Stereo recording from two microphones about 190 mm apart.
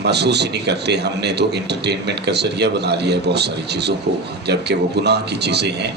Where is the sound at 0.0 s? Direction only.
60° right (ahead or behind).